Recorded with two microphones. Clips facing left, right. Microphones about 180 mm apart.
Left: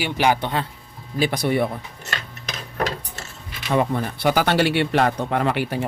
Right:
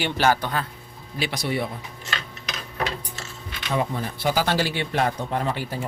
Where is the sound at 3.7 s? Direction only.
60° left (ahead or behind).